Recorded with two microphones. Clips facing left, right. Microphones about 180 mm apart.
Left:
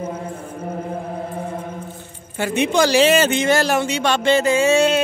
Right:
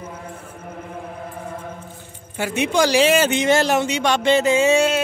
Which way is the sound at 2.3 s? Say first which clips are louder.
Left 2 dB; 10° right (ahead or behind).